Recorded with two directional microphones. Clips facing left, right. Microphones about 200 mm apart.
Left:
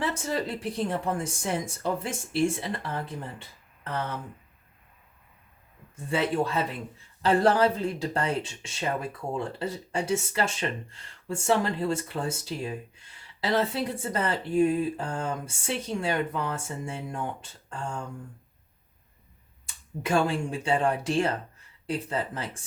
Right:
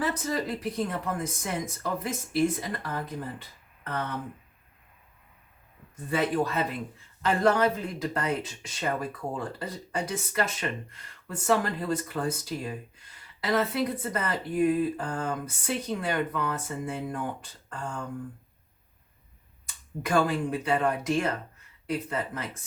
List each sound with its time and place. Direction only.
0.0 s speech: 30° left (ahead or behind)
6.1 s speech: 25° left (ahead or behind)
20.0 s speech: 25° left (ahead or behind)